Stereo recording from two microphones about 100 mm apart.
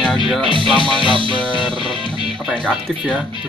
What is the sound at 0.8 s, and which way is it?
Music, 55° right (ahead or behind).